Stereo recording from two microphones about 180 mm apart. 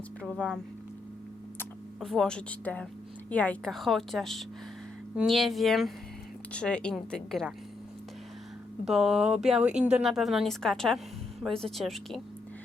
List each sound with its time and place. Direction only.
1.5 s speech: centre (ahead or behind)
8.8 s speech: centre (ahead or behind)